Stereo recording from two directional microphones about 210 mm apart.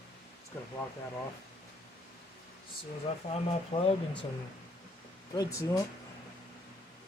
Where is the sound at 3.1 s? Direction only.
30° left (ahead or behind).